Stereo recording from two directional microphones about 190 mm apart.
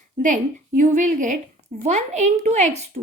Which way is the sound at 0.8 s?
40° right (ahead or behind).